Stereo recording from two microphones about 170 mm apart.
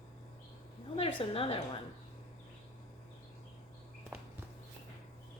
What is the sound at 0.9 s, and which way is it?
Speech, 35° left (ahead or behind).